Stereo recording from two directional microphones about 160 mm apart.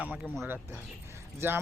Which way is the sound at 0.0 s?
5° right (ahead or behind).